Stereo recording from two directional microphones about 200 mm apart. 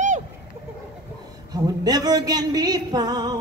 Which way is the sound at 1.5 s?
20° right (ahead or behind).